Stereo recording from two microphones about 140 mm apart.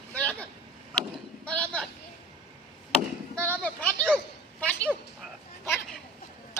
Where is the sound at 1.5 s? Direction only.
10° left (ahead or behind).